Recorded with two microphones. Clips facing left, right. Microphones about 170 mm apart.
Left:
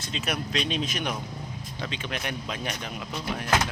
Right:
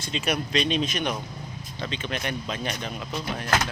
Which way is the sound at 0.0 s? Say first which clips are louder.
Right 3 dB; centre (ahead or behind).